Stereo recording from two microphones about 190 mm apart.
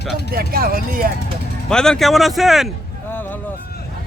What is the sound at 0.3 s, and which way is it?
Speech, 50° right (ahead or behind).